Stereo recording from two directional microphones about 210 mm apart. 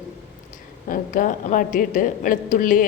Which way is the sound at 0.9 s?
40° left (ahead or behind).